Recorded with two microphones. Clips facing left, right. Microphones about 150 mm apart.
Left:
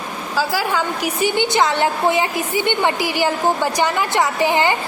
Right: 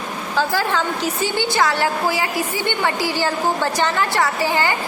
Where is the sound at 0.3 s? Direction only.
10° left (ahead or behind).